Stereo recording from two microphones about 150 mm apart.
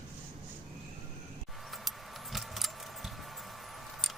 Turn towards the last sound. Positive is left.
turn(degrees=0)  # may be behind; listen again after turning